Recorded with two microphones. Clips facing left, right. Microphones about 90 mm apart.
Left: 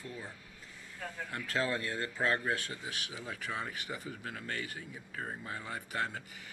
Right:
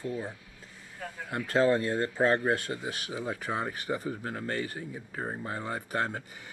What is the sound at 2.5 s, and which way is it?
Speech, 50° right (ahead or behind).